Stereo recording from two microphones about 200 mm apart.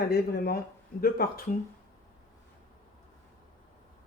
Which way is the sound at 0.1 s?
50° left (ahead or behind).